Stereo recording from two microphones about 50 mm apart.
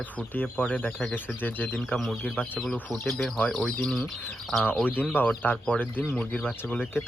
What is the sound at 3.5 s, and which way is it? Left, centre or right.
Speech, centre.